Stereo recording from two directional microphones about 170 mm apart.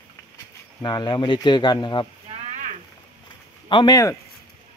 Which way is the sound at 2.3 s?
40° right (ahead or behind).